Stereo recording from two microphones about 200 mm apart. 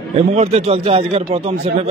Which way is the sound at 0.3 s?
30° right (ahead or behind).